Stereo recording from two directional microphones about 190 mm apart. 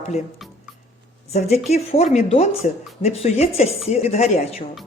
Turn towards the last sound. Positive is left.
turn(degrees=35)  # may be behind; listen again after turning